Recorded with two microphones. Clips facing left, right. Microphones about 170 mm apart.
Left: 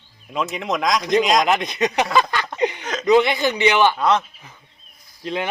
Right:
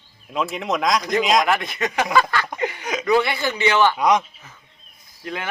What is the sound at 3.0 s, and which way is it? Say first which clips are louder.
Speech: left 4 dB; 20° left (ahead or behind).